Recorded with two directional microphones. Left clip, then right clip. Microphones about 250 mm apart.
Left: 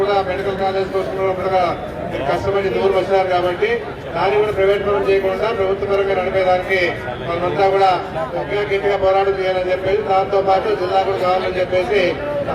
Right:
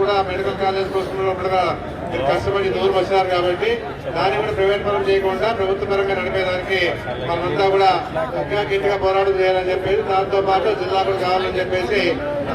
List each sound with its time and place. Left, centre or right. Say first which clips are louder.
0.0 s a sound: left 1 dB; right
2.3 s a man's voice: left 3 dB; right
7.6 s a man's voice: left 1 dB; centre